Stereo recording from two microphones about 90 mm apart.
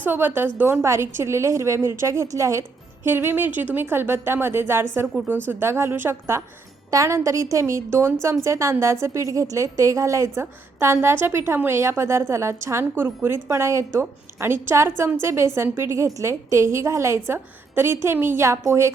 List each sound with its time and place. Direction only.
0.0 s a woman's voice: 25° right (ahead or behind)